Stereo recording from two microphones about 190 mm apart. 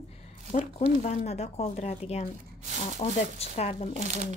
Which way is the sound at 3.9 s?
40° right (ahead or behind).